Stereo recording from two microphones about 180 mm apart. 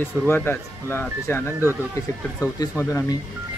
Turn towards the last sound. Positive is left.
turn(degrees=15)  # may be behind; listen again after turning